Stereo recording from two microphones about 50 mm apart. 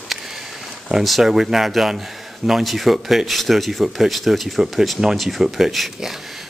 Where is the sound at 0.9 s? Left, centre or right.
Centre.